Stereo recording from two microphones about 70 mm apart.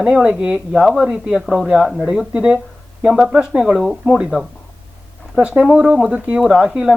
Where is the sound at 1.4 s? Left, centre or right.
Centre.